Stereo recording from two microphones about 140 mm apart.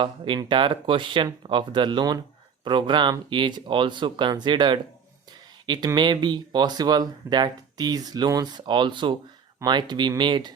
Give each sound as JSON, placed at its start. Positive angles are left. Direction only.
{"t": 0.0, "sound": "speech", "side_deg": -35}